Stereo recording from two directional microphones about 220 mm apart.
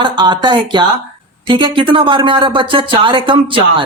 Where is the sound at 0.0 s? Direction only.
20° right (ahead or behind).